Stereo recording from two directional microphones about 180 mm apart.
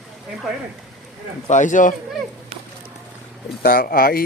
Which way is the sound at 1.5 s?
45° left (ahead or behind).